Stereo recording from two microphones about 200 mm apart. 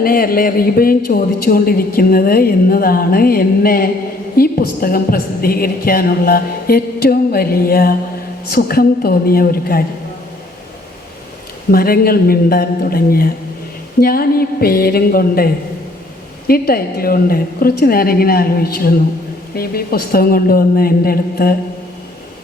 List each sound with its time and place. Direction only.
0.0 s a woman's voice: 45° left (ahead or behind)
11.7 s a woman's voice: 50° left (ahead or behind)